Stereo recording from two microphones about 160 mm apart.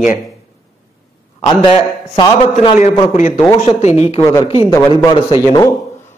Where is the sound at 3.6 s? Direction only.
45° left (ahead or behind).